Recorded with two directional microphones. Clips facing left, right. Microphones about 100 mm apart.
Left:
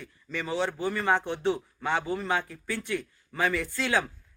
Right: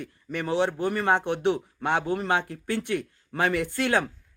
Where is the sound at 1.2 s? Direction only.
65° right (ahead or behind).